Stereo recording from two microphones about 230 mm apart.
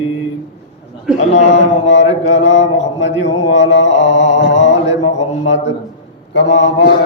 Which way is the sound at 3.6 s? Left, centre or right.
Left.